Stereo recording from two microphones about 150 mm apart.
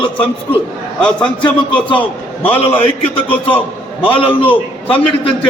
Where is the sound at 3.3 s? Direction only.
10° left (ahead or behind).